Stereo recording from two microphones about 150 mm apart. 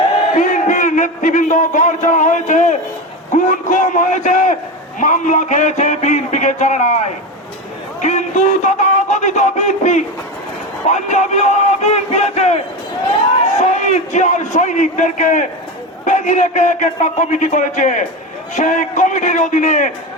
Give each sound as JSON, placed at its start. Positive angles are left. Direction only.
{"t": 0.3, "sound": "a man's voice", "side_deg": 55}